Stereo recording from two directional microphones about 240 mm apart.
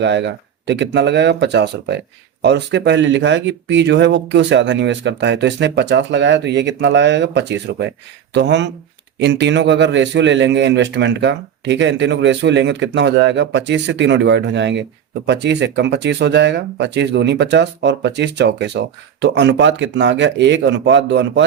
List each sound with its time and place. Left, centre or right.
0.0 s speech: right